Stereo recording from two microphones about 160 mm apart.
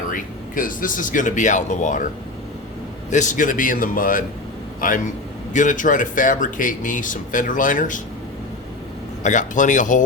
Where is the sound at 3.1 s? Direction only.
50° left (ahead or behind).